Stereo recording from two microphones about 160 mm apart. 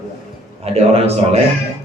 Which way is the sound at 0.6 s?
40° right (ahead or behind).